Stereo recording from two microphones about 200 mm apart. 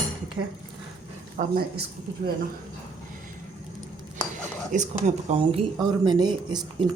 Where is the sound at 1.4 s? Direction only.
50° right (ahead or behind).